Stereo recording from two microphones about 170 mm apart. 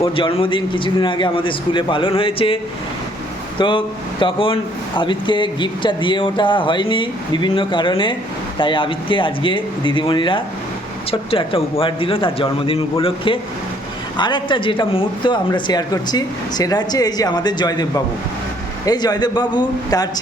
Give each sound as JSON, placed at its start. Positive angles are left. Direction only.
{"t": 0.0, "sound": "speech", "side_deg": 30}
{"t": 3.6, "sound": "a man's voice", "side_deg": 30}
{"t": 18.9, "sound": "speech", "side_deg": 25}